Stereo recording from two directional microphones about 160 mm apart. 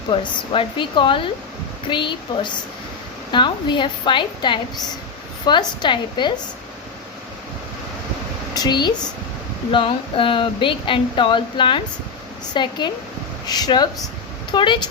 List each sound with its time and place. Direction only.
0.1 s a woman's voice: 35° left (ahead or behind)
8.5 s a woman's voice: 25° left (ahead or behind)